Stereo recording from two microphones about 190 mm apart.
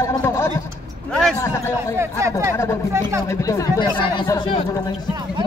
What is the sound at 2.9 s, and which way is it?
Speech, 15° right (ahead or behind).